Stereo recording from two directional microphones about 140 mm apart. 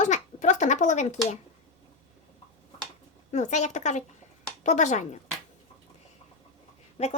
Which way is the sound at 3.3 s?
55° left (ahead or behind).